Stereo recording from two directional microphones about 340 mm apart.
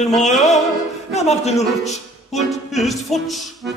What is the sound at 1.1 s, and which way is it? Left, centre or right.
Speech, centre.